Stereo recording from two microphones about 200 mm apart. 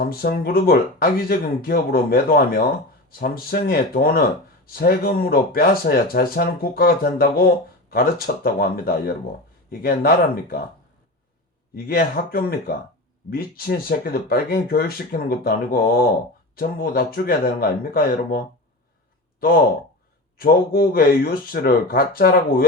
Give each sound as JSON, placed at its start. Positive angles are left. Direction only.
{"t": 0.0, "sound": "speech", "side_deg": 50}
{"t": 11.7, "sound": "speech", "side_deg": 50}
{"t": 20.4, "sound": "speech", "side_deg": 50}